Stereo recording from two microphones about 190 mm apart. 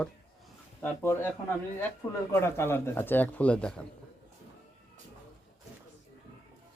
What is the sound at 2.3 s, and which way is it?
Speech, 15° left (ahead or behind).